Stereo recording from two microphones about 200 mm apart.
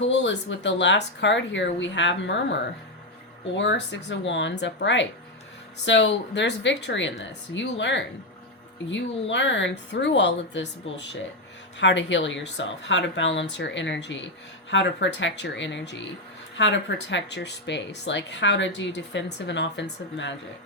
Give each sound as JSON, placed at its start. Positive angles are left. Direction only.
{"t": 0.0, "sound": "speech", "side_deg": 65}
{"t": 3.6, "sound": "speech", "side_deg": 65}